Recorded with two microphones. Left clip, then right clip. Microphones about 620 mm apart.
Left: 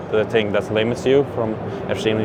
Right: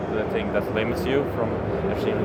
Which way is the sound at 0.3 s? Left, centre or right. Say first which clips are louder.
Left 5 dB; left.